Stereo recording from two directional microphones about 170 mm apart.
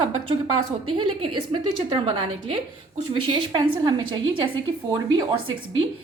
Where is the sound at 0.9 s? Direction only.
30° right (ahead or behind).